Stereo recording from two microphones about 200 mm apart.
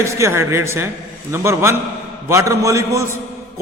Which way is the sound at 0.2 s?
15° right (ahead or behind).